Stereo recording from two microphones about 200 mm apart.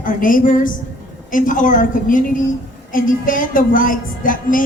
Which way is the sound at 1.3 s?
40° left (ahead or behind).